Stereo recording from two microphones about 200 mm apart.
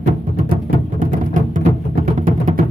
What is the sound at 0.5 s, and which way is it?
Music, 45° right (ahead or behind).